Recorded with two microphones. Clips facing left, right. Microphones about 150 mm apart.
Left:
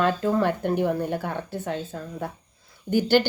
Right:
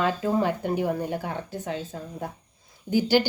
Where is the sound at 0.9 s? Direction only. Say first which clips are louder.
Left 2 dB; 10° right (ahead or behind).